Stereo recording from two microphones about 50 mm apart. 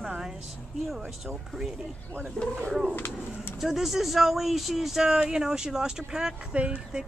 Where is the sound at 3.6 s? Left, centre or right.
Centre.